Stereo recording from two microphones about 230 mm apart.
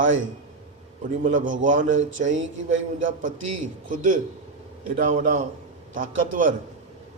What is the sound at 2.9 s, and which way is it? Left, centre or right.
A man's voice, right.